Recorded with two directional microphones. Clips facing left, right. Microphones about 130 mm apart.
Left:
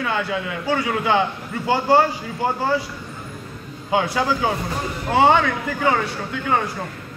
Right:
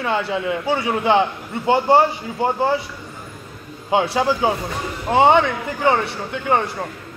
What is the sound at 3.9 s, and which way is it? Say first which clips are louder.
A man's voice: right 2 dB; 25° right (ahead or behind).